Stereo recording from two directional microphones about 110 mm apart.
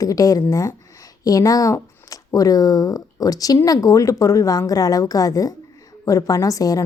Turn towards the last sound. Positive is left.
turn(degrees=35)  # may be behind; listen again after turning